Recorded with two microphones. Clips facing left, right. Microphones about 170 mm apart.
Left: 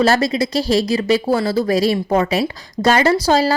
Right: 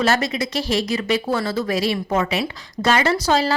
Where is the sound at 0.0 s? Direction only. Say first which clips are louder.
Left 5 dB; 35° left (ahead or behind).